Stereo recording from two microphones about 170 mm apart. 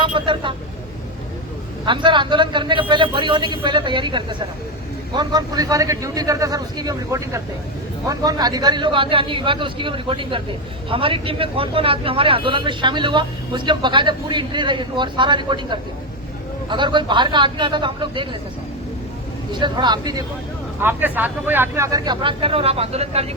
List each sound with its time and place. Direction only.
0.0 s speech: 30° right (ahead or behind)
1.8 s speech: 30° right (ahead or behind)
19.5 s speech: 25° right (ahead or behind)
20.8 s speech: 10° right (ahead or behind); by 23.2 s 35° right (ahead or behind)